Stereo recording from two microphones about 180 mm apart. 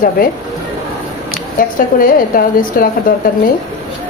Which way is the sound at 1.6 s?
50° left (ahead or behind).